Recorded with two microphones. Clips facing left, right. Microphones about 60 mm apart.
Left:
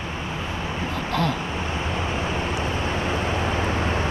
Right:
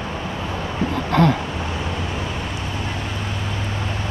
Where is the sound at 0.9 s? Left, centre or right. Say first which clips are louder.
Right 7 dB; right.